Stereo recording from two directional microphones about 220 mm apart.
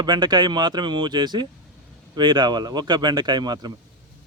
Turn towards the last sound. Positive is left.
turn(degrees=-20)  # may be behind; listen again after turning